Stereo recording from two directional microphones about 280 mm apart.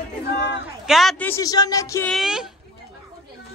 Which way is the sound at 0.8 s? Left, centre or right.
Centre.